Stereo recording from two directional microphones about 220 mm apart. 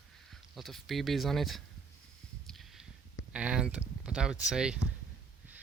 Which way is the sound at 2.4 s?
Centre (ahead or behind).